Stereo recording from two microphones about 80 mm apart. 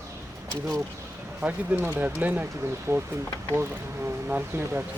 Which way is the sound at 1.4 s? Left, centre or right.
Centre.